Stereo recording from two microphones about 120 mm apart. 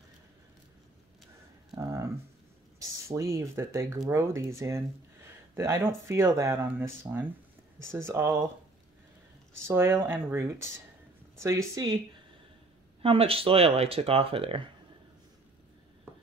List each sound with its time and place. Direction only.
1.8 s a sound: 25° right (ahead or behind)
3.1 s speech: 25° right (ahead or behind)
9.7 s speech: 20° right (ahead or behind)
13.0 s speech: 50° right (ahead or behind)